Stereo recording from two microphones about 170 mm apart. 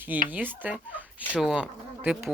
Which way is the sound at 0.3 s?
10° right (ahead or behind).